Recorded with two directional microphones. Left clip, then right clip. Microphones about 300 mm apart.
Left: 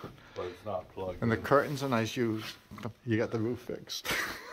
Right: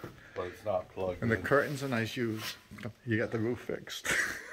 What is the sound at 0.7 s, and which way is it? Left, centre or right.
Speech, right.